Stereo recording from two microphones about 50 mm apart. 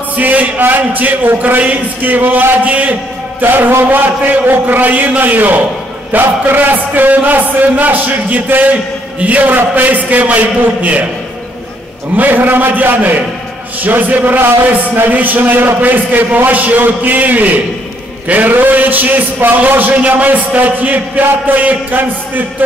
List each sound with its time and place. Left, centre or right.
0.2 s a man's voice: right
12.2 s a man's voice: right